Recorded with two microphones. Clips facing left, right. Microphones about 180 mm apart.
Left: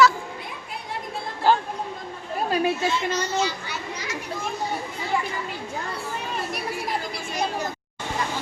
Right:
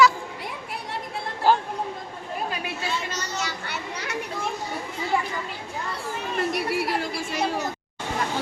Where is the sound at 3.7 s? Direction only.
60° right (ahead or behind).